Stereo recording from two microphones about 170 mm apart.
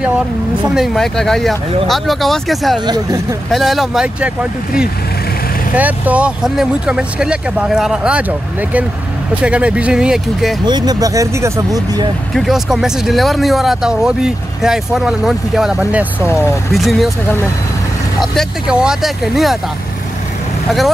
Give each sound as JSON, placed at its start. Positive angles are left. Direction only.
{"t": 0.7, "sound": "speech", "side_deg": 0}
{"t": 2.9, "sound": "speech", "side_deg": -20}
{"t": 3.5, "sound": "speech", "side_deg": 0}
{"t": 10.6, "sound": "speech", "side_deg": -25}
{"t": 12.4, "sound": "speech", "side_deg": 0}
{"t": 16.3, "sound": "speech", "side_deg": 15}
{"t": 16.7, "sound": "speech", "side_deg": 0}
{"t": 18.2, "sound": "speech", "side_deg": 0}